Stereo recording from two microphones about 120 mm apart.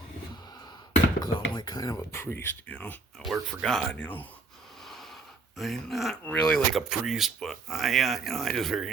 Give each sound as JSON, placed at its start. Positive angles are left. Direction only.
{"t": 1.2, "sound": "speech", "side_deg": 35}
{"t": 5.5, "sound": "speech", "side_deg": 0}